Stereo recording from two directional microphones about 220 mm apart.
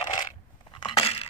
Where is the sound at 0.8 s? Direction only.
25° left (ahead or behind).